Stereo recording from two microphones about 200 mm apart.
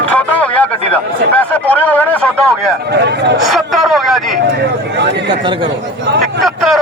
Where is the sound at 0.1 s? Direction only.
5° left (ahead or behind).